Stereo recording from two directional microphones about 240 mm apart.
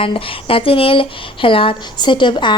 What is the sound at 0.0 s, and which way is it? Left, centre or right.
Speech, left.